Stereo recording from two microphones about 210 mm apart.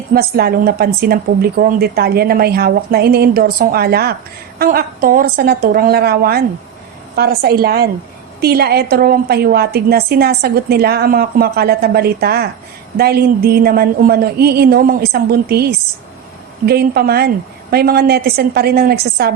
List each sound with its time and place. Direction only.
0.1 s a woman's voice: 45° right (ahead or behind)
16.6 s a woman's voice: 50° right (ahead or behind)